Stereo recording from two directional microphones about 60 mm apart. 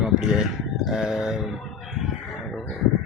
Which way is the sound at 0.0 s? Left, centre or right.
Centre.